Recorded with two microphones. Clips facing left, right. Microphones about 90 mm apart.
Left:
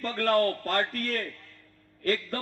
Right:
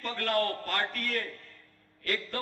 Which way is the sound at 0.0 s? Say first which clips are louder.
Left 5 dB; 35° left (ahead or behind).